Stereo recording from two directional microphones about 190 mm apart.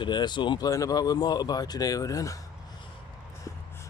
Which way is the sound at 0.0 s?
25° left (ahead or behind).